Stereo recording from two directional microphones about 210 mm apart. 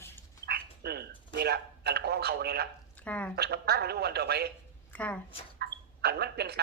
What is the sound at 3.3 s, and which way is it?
Speech, 50° right (ahead or behind).